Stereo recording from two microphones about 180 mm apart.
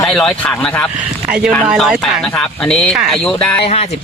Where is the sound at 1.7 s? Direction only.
5° right (ahead or behind).